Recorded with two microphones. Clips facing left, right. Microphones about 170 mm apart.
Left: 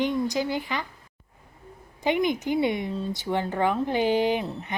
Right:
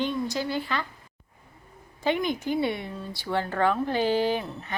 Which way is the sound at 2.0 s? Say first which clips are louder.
Left 2 dB; 15° left (ahead or behind).